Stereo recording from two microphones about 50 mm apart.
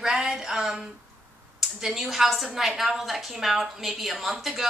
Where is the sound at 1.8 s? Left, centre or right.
Centre.